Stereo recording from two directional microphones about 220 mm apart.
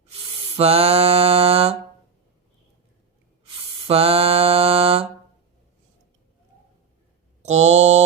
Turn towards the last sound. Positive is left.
turn(degrees=-30)  # may be behind; listen again after turning